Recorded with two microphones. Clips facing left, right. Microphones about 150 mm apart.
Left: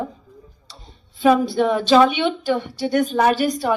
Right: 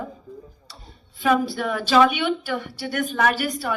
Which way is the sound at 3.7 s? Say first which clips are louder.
Left 6 dB; 45° left (ahead or behind).